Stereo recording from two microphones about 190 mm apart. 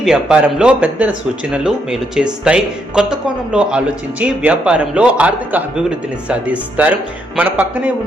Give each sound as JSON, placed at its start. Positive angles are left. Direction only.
{"t": 0.0, "sound": "a man's voice", "side_deg": -5}